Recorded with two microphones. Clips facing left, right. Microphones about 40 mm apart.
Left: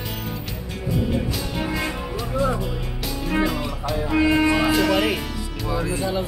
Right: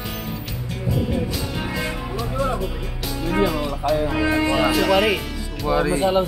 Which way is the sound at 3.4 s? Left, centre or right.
Centre.